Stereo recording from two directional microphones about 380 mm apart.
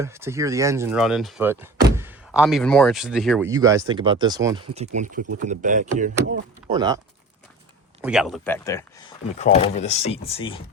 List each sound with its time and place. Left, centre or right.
0.0 s speech: centre
8.0 s speech: centre